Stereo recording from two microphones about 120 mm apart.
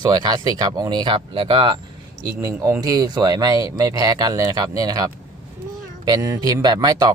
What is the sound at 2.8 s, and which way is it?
Speech, 35° right (ahead or behind).